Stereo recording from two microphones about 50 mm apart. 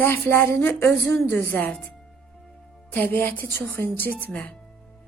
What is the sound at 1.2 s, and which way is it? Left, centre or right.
Speech, left.